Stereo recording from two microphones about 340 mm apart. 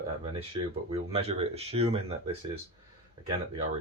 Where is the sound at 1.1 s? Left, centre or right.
Centre.